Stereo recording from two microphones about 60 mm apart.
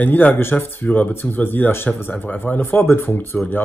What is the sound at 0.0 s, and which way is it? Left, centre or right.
Speech, left.